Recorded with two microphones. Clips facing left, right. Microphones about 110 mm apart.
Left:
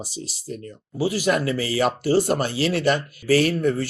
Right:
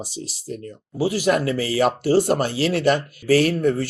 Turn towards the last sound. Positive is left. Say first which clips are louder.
# right 2 dB
turn(degrees=-45)  # may be behind; listen again after turning